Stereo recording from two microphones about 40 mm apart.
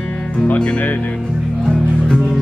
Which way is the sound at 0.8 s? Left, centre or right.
Left.